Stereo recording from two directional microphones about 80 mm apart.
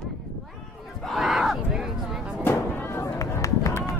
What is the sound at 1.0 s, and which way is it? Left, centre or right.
Crowd, centre.